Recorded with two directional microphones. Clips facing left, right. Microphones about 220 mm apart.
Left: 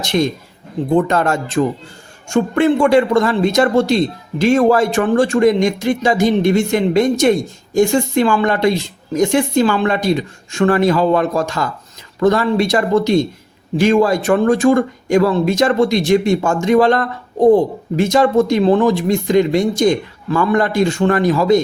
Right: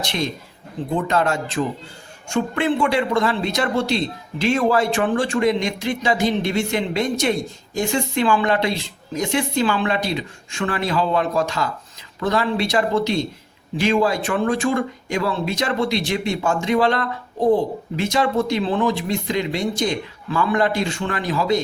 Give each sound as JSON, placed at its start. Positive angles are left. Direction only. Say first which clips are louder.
{"t": 0.0, "sound": "a man's voice", "louder": "left 8 dB", "side_deg": 45}